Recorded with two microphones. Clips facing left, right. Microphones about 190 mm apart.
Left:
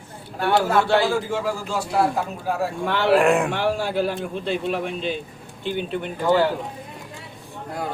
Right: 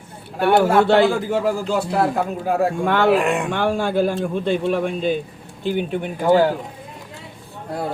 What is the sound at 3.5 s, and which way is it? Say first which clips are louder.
Speech: right 3 dB; 50° right (ahead or behind).